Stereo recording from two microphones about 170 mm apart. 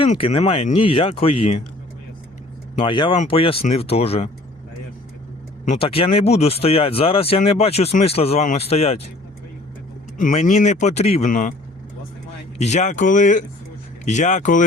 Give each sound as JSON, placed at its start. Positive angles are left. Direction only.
{"t": 0.2, "sound": "speech", "side_deg": 30}
{"t": 2.7, "sound": "speech", "side_deg": 30}
{"t": 5.6, "sound": "speech", "side_deg": 40}
{"t": 10.2, "sound": "speech", "side_deg": 50}
{"t": 12.5, "sound": "speech", "side_deg": 40}